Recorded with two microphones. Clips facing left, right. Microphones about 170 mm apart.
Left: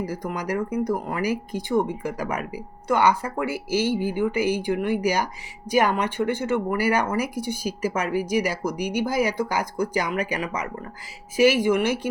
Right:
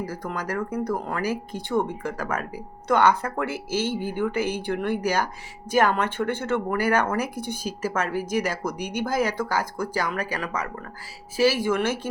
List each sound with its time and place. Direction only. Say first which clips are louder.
0.0 s speech: left 2 dB; 15° left (ahead or behind)